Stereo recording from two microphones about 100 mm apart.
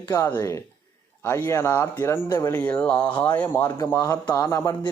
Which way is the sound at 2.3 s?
40° left (ahead or behind).